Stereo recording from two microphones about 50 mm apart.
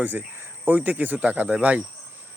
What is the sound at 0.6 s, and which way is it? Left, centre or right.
Speech, right.